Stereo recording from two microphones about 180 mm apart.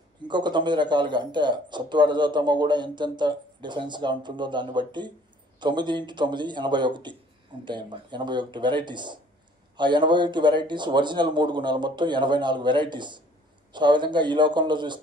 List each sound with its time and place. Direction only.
0.3 s speech: 25° right (ahead or behind)